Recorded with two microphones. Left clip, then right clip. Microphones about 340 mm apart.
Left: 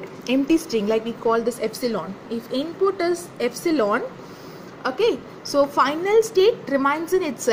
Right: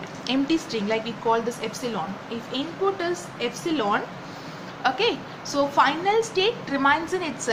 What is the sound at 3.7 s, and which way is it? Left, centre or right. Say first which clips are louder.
A woman's voice: left 3 dB; left.